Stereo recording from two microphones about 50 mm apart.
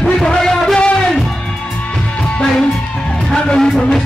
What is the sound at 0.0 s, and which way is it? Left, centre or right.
Music, centre.